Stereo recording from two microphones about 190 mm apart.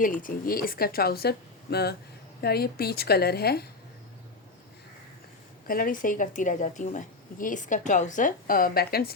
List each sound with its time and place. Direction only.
0.2 s a woman's voice: 50° left (ahead or behind)
5.6 s speech: 50° left (ahead or behind)